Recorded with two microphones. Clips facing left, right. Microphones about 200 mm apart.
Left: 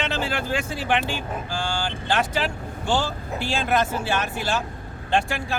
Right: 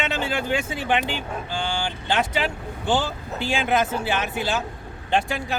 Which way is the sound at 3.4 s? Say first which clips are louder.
Right 1 dB; 20° right (ahead or behind).